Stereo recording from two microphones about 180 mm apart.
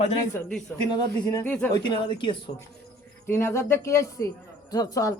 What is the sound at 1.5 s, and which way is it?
Speech, 5° left (ahead or behind).